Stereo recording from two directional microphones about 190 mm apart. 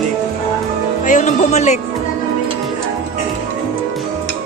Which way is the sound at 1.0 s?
40° left (ahead or behind).